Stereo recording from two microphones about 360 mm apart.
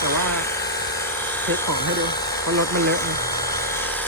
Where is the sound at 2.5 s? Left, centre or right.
Centre.